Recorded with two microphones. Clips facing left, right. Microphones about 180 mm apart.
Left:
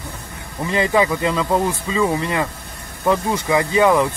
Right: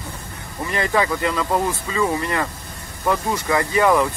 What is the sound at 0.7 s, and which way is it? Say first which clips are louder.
Speech: left 3 dB; 20° left (ahead or behind).